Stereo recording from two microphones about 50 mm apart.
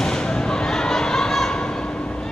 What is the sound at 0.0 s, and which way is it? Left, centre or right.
Thump, centre.